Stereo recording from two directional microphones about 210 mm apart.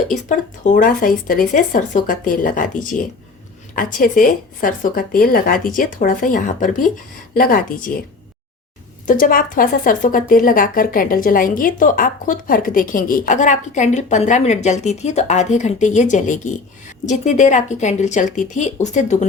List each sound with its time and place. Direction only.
0.1 s speech: 35° left (ahead or behind)
3.8 s a woman's voice: 40° left (ahead or behind)
9.0 s speech: 40° left (ahead or behind)